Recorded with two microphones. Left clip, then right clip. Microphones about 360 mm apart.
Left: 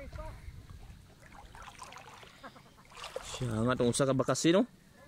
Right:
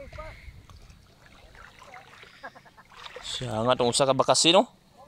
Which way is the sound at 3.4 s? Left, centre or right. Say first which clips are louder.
Right 7 dB; centre.